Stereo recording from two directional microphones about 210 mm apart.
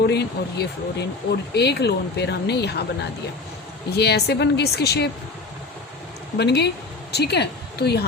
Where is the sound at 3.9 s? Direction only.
50° left (ahead or behind).